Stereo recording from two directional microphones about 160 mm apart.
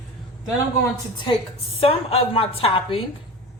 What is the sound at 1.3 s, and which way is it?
Speech, 25° left (ahead or behind).